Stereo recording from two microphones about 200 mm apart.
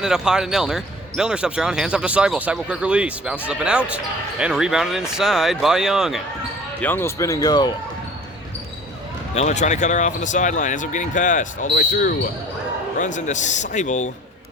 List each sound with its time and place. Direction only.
0.0 s speech: 5° right (ahead or behind)
6.8 s speech: 10° left (ahead or behind)
9.3 s speech: 35° left (ahead or behind)
11.7 s speech: 50° left (ahead or behind)